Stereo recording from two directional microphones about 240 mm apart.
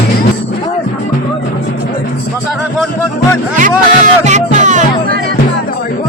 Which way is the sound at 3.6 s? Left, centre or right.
Right.